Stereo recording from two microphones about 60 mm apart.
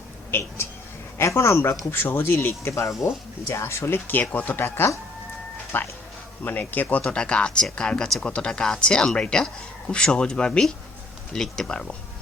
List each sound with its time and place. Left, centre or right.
0.3 s speech: left
4.4 s speech: left
7.1 s speech: centre